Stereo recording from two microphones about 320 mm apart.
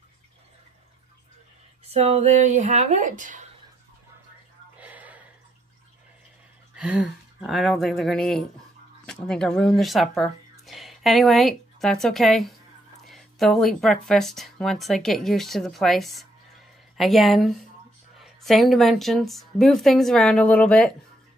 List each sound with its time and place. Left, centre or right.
1.9 s speech: centre
4.7 s gasp: centre
6.7 s a woman's voice: centre